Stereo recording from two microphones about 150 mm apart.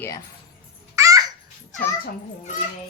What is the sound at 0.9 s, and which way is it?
Babbling, 20° right (ahead or behind).